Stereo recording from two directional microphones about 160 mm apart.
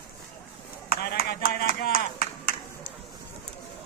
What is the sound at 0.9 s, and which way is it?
Clapping, 75° left (ahead or behind).